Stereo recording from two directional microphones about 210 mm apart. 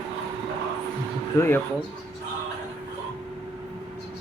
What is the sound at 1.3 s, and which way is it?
Speech, 10° left (ahead or behind).